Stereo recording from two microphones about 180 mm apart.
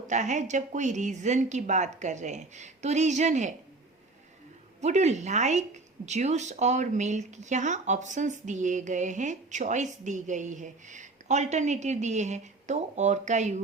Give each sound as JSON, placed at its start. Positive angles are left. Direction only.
{"t": 0.1, "sound": "speech", "side_deg": -40}
{"t": 4.8, "sound": "speech", "side_deg": -40}